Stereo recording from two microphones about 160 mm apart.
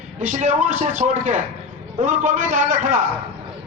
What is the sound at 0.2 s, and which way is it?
A man's voice, 50° right (ahead or behind).